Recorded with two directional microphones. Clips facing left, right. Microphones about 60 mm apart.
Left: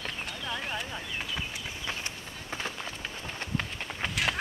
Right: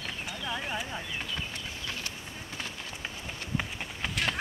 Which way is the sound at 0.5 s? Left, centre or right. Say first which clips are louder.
Right 1 dB; centre.